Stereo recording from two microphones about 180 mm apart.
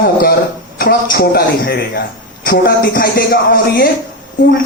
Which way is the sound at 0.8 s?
60° left (ahead or behind).